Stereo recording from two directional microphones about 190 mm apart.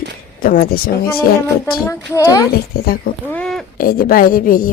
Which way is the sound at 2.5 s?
55° left (ahead or behind).